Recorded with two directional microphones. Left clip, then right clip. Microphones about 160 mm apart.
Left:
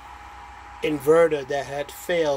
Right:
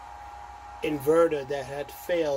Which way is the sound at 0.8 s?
15° left (ahead or behind).